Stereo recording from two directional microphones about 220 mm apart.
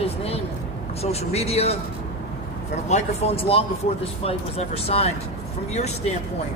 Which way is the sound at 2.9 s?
25° left (ahead or behind).